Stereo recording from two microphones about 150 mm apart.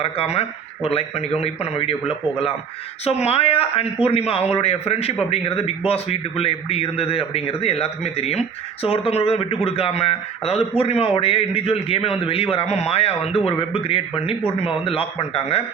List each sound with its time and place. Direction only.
0.0 s a man's voice: 40° left (ahead or behind)
3.0 s a man's voice: 45° left (ahead or behind)